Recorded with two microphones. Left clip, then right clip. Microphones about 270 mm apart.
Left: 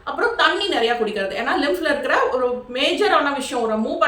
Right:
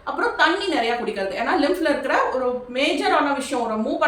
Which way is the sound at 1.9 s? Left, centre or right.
Centre.